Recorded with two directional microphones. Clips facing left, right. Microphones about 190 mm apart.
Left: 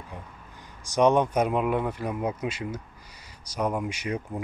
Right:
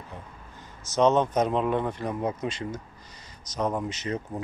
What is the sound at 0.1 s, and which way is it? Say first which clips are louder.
Speech: even; 15° left (ahead or behind).